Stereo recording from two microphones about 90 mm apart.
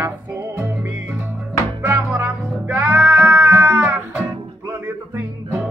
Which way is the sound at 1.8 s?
25° right (ahead or behind).